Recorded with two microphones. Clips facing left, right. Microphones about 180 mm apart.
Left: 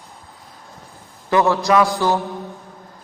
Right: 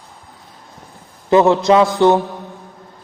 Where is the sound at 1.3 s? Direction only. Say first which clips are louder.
Right 5 dB; 20° right (ahead or behind).